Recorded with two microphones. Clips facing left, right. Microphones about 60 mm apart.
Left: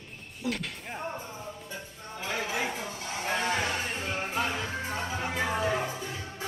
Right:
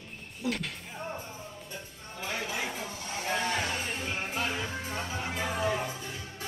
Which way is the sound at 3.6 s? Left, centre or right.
Left.